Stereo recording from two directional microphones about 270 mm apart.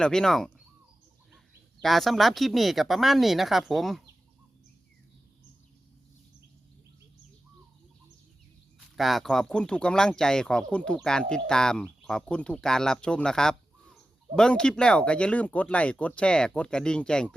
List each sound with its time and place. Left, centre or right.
0.0 s speech: centre
1.8 s speech: centre
9.0 s speech: centre